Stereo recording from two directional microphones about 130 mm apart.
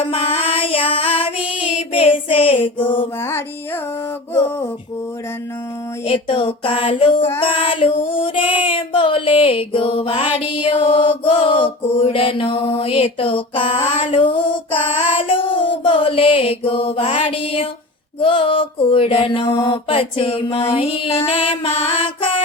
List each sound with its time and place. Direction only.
0.1 s female singing: 50° left (ahead or behind)
6.1 s child singing: 45° left (ahead or behind)
14.0 s female singing: 40° left (ahead or behind)
14.9 s mantra: 40° left (ahead or behind)
18.2 s child singing: 40° left (ahead or behind)